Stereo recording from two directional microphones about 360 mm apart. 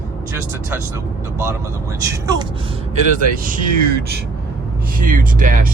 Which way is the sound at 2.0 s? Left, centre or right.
Centre.